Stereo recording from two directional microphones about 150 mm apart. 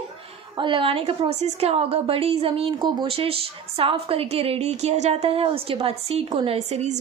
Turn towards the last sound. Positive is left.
turn(degrees=-45)  # may be behind; listen again after turning